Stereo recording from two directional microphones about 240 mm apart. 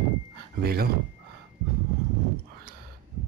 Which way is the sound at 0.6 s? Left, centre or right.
Right.